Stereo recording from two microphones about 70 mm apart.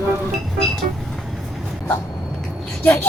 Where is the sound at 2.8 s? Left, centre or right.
Left.